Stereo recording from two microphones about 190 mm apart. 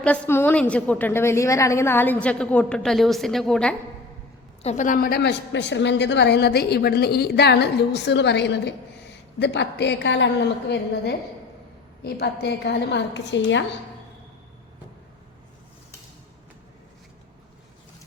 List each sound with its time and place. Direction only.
0.0 s a woman's voice: 10° left (ahead or behind)
4.6 s a woman's voice: 40° left (ahead or behind); by 13.7 s 70° left (ahead or behind)